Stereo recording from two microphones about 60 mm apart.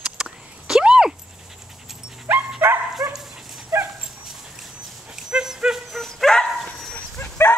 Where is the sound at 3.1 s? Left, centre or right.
Centre.